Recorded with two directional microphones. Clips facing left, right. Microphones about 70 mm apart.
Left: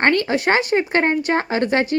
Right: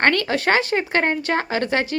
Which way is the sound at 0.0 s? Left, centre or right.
Left.